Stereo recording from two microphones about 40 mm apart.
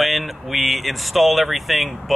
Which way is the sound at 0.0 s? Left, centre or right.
Centre.